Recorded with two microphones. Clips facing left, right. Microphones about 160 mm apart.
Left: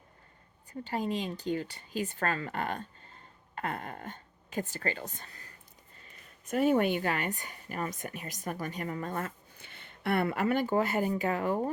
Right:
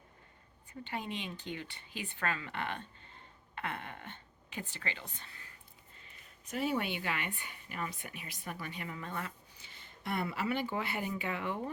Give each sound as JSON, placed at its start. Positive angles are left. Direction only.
{"t": 0.7, "sound": "speech", "side_deg": 40}